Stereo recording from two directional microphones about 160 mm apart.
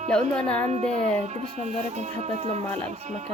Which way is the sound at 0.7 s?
45° right (ahead or behind).